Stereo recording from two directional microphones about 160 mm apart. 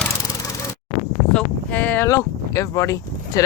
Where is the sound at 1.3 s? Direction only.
10° left (ahead or behind).